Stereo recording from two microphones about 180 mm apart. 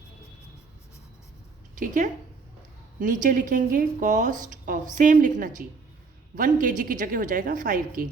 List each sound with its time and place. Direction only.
1.7 s a woman's voice: 45° right (ahead or behind)